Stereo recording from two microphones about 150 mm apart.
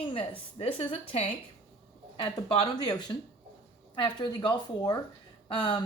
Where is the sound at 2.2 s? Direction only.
35° left (ahead or behind).